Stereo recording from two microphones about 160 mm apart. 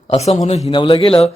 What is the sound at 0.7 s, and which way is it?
Speech, 30° left (ahead or behind).